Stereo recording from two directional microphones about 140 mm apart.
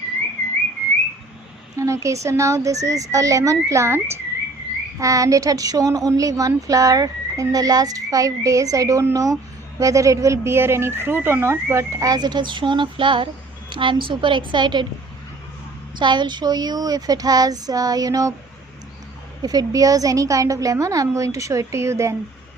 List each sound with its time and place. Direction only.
1.7 s a woman's voice: 20° right (ahead or behind)
16.0 s a woman's voice: 35° right (ahead or behind)
19.4 s a woman's voice: 25° right (ahead or behind)